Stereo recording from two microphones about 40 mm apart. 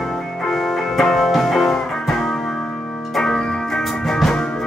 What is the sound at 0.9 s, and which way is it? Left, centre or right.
Music, centre.